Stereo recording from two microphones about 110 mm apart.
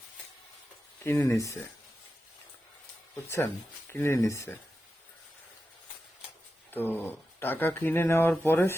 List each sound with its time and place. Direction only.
1.0 s speech: 20° left (ahead or behind)
3.2 s speech: 20° left (ahead or behind)
6.7 s speech: 20° left (ahead or behind)